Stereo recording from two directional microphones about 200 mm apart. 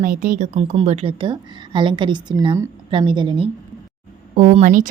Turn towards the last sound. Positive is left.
turn(degrees=-40)  # may be behind; listen again after turning